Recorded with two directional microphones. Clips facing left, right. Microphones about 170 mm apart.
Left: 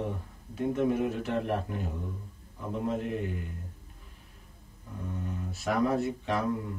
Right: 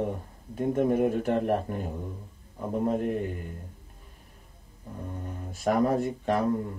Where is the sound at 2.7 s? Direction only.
45° right (ahead or behind).